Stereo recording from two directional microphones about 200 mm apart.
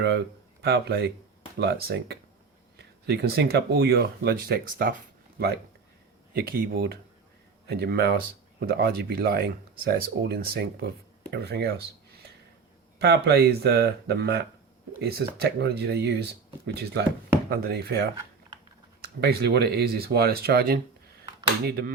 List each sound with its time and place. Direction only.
0.6 s speech: 55° right (ahead or behind)
13.0 s speech: 55° right (ahead or behind)